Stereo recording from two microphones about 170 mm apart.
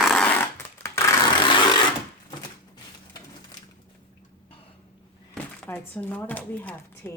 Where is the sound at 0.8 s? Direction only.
15° left (ahead or behind).